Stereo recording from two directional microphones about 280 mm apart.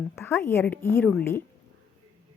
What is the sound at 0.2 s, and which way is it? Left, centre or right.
A woman's voice, centre.